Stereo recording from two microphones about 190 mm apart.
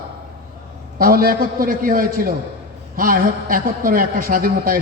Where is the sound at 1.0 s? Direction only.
50° right (ahead or behind).